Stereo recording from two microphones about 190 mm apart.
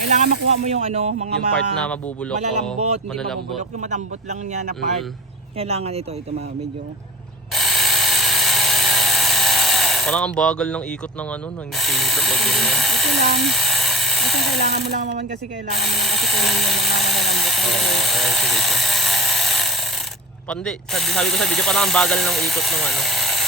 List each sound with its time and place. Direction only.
0.1 s speech: 40° right (ahead or behind)
1.5 s speech: 5° left (ahead or behind)
2.7 s speech: 35° right (ahead or behind)
3.2 s speech: centre (ahead or behind)
3.6 s speech: 40° right (ahead or behind)
7.5 s a sound: centre (ahead or behind)
11.8 s speech: centre (ahead or behind)
13.1 s speech: 65° right (ahead or behind)
13.4 s a sound: centre (ahead or behind)
14.8 s speech: 40° right (ahead or behind)
15.8 s speech: centre (ahead or behind)